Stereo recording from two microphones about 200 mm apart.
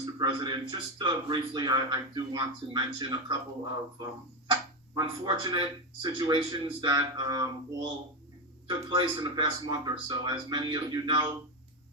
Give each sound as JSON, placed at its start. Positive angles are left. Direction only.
{"t": 0.0, "sound": "a man's voice", "side_deg": -20}
{"t": 4.9, "sound": "a man's voice", "side_deg": -20}
{"t": 8.9, "sound": "a man's voice", "side_deg": -20}